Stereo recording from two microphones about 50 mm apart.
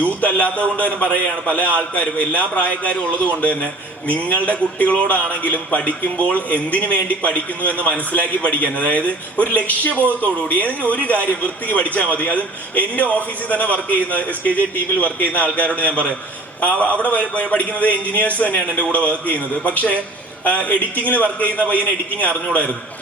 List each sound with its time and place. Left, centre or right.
0.0 s a man's voice: left